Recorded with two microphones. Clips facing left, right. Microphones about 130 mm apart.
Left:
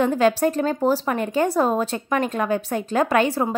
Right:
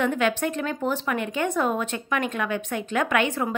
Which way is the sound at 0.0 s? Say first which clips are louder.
Left 5 dB; 35° left (ahead or behind).